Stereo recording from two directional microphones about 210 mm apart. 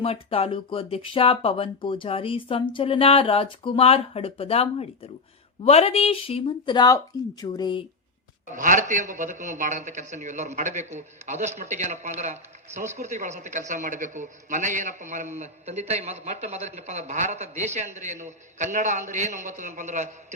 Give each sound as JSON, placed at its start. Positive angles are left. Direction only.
{"t": 0.0, "sound": "speech", "side_deg": 25}
{"t": 8.5, "sound": "a man's voice", "side_deg": -40}